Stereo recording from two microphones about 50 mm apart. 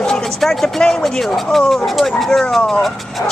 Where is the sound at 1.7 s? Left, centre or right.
Centre.